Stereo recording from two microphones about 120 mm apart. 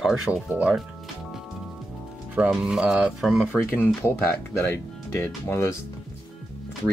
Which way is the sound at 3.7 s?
20° left (ahead or behind).